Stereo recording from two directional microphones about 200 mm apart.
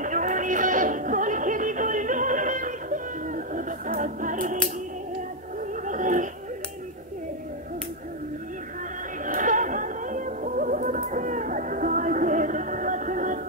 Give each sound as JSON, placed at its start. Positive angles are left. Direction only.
{"t": 0.0, "sound": "music", "side_deg": -40}
{"t": 5.6, "sound": "a sound", "side_deg": -40}
{"t": 9.2, "sound": "music", "side_deg": -40}